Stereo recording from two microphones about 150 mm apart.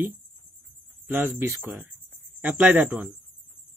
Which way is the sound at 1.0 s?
15° right (ahead or behind).